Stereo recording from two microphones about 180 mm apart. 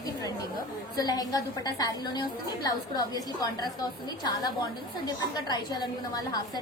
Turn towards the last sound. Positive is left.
turn(degrees=25)  # may be behind; listen again after turning